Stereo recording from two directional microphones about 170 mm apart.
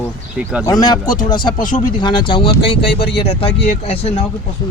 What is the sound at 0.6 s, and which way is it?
Speech, 25° left (ahead or behind).